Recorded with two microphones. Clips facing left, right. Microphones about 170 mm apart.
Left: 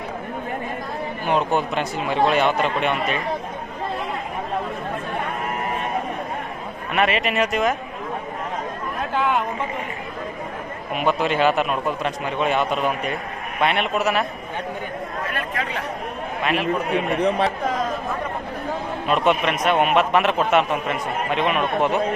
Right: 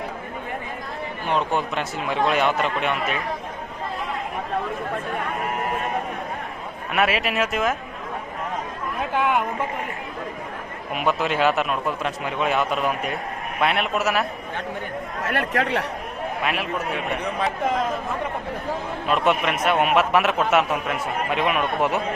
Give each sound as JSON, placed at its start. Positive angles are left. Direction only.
{"t": 1.3, "sound": "a man's voice", "side_deg": 5}
{"t": 6.9, "sound": "a man's voice", "side_deg": -5}
{"t": 9.1, "sound": "speech", "side_deg": -10}
{"t": 10.9, "sound": "a man's voice", "side_deg": 0}
{"t": 15.2, "sound": "speech", "side_deg": -75}
{"t": 16.4, "sound": "a man's voice", "side_deg": -5}
{"t": 17.2, "sound": "speech", "side_deg": 30}
{"t": 19.0, "sound": "a man's voice", "side_deg": 0}